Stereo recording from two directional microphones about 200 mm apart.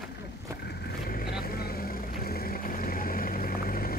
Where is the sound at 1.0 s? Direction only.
50° left (ahead or behind).